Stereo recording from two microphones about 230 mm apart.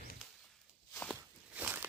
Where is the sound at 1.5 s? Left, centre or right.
Centre.